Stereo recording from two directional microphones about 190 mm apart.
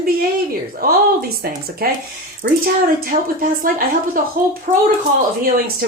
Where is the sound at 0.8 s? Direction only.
50° right (ahead or behind).